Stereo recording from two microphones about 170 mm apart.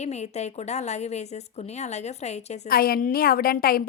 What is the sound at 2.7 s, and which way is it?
A woman's voice, 60° left (ahead or behind).